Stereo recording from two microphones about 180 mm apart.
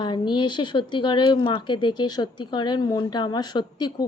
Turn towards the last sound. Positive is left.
turn(degrees=25)  # may be behind; listen again after turning